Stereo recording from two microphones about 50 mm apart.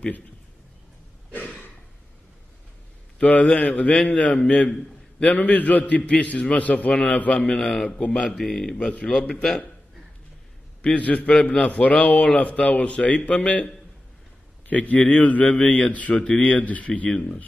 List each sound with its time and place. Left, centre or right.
1.3 s a sound: left
3.2 s a man's voice: left
7.5 s a man's voice: centre
7.8 s a man's voice: left; by 9.6 s centre
10.8 s a man's voice: left
14.7 s a man's voice: left
16.2 s a man's voice: centre
16.4 s a man's voice: left